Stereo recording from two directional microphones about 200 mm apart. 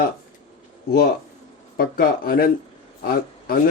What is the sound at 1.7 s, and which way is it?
A man's voice, 50° left (ahead or behind).